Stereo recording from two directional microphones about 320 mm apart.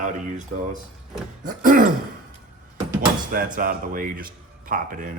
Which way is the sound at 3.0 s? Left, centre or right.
Right.